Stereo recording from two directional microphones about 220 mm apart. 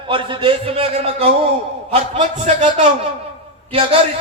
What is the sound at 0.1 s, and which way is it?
A man's voice, 20° right (ahead or behind).